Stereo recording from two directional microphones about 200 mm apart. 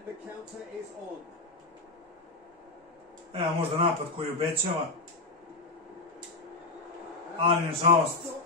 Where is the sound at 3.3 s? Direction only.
30° right (ahead or behind).